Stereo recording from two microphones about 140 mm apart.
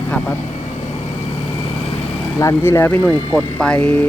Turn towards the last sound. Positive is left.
turn(degrees=10)  # may be behind; listen again after turning